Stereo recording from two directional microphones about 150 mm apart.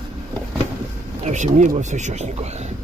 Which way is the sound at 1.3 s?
55° right (ahead or behind).